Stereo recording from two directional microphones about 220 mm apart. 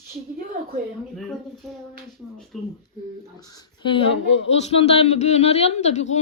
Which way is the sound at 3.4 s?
15° left (ahead or behind).